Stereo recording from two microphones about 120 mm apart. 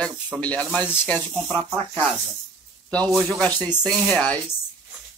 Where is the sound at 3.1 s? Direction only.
Centre (ahead or behind).